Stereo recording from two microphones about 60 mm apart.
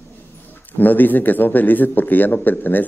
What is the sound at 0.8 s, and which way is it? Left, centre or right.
Speech, left.